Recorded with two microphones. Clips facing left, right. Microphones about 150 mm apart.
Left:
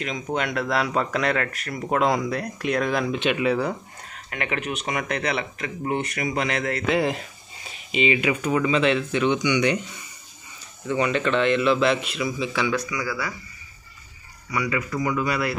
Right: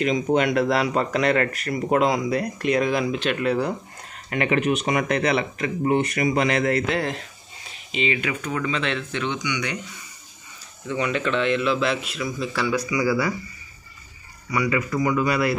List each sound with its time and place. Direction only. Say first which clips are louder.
0.0 s speech: right 7 dB; centre (ahead or behind)
9.4 s speech: left 7 dB; 25° left (ahead or behind)
10.9 s speech: left 2 dB; centre (ahead or behind)
14.9 s speech: right 3 dB; 25° right (ahead or behind)
15.2 s speech: right 3 dB; 10° right (ahead or behind)